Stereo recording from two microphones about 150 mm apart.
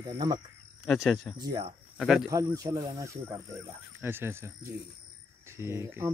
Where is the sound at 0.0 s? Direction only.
25° right (ahead or behind).